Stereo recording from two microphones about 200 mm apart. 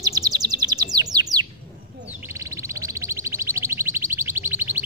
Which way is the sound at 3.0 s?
15° right (ahead or behind).